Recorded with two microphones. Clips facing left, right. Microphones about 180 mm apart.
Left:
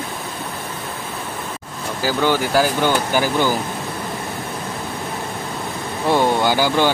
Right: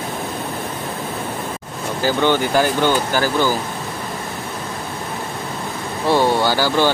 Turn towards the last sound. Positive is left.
turn(degrees=15)  # may be behind; listen again after turning